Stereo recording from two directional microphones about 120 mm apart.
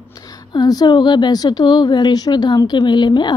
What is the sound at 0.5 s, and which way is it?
Speech, 35° left (ahead or behind).